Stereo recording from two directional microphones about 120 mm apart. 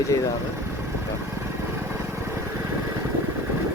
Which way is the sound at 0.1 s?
30° left (ahead or behind).